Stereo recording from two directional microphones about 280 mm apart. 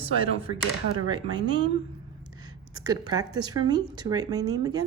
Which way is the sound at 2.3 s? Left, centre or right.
Centre.